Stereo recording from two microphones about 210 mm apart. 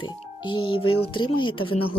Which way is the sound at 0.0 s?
20° left (ahead or behind).